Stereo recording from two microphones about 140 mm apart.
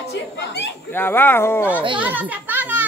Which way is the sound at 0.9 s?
15° left (ahead or behind).